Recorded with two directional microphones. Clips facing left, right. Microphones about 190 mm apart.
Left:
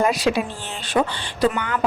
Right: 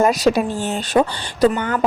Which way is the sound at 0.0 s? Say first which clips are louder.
Right 4 dB; 45° right (ahead or behind).